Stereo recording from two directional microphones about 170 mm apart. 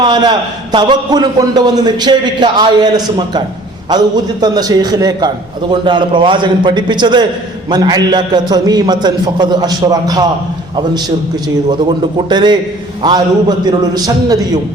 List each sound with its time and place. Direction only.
0.0 s a man's voice: 25° right (ahead or behind)
11.4 s a man's voice: 25° right (ahead or behind)